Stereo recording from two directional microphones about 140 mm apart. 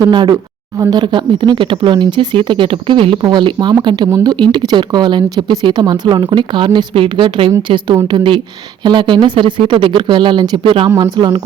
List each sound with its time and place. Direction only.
0.0 s speech: 30° right (ahead or behind)